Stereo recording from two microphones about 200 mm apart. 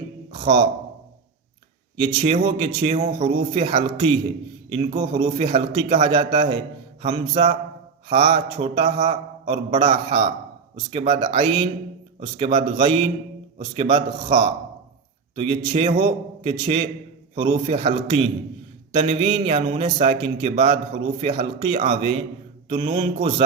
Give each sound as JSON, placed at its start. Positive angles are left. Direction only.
{"t": 2.0, "sound": "a man's voice", "side_deg": -30}